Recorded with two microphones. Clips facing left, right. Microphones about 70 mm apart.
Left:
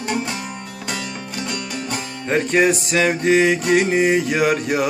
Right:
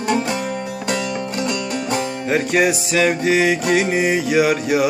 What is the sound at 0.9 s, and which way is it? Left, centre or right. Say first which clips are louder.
Music: right 6 dB; right.